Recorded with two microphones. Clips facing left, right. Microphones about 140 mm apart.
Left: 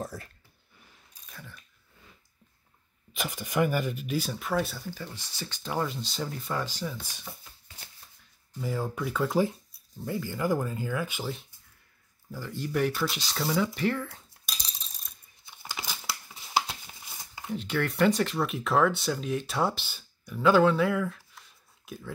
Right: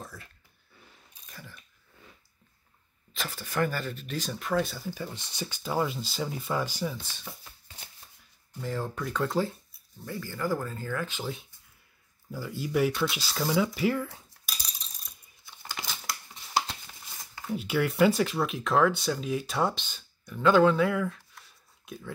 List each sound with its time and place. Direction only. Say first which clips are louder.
0.0 s a sound: left 8 dB; 40° left (ahead or behind)
1.2 s chewing: even; centre (ahead or behind)
3.1 s speech: left 3 dB; 15° left (ahead or behind)
4.9 s speech: right 3 dB; 20° right (ahead or behind)
8.5 s speech: left 1 dB; 10° left (ahead or behind)
10.0 s speech: left 3 dB; 20° left (ahead or behind)
12.3 s speech: right 1 dB; 5° right (ahead or behind)
15.6 s a sound: left 1 dB; 10° left (ahead or behind)
17.6 s speech: right 2 dB; 10° right (ahead or behind)